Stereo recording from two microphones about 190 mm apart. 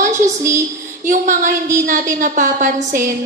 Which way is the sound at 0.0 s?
40° right (ahead or behind).